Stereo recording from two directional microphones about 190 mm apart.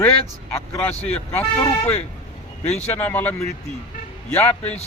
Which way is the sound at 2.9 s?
10° left (ahead or behind).